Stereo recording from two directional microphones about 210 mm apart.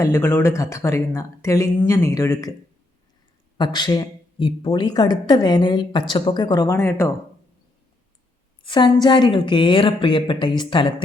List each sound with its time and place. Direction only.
0.0 s speech: 10° left (ahead or behind)
3.6 s a woman's voice: 20° left (ahead or behind)
8.6 s a woman's voice: 20° left (ahead or behind)